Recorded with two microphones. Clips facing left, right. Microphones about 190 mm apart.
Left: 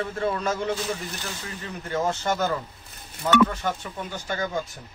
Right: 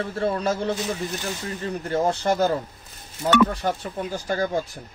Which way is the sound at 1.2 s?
15° right (ahead or behind).